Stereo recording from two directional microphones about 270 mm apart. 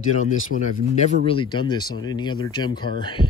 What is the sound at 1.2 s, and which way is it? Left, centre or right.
Speech, centre.